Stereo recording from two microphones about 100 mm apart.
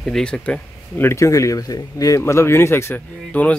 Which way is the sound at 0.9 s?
25° left (ahead or behind).